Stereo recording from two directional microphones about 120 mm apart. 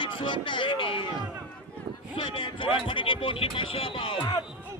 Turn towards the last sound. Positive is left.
turn(degrees=45)  # may be behind; listen again after turning